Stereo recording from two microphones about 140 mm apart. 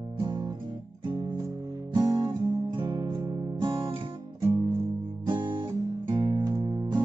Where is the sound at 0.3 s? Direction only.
30° right (ahead or behind).